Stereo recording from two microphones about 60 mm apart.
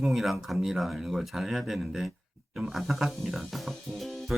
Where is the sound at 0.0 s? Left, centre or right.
Centre.